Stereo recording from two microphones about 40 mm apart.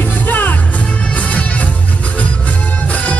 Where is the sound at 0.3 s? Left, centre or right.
Left.